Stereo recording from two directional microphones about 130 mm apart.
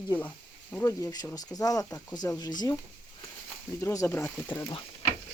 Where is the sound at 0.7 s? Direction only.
20° left (ahead or behind).